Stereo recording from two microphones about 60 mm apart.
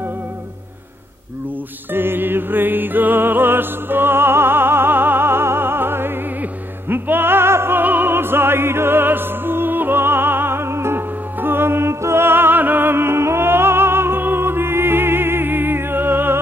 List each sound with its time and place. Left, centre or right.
1.9 s music: right
7.8 s opera: right